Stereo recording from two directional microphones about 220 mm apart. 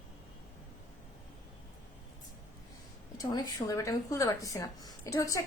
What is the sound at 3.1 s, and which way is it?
A woman's voice, 15° left (ahead or behind).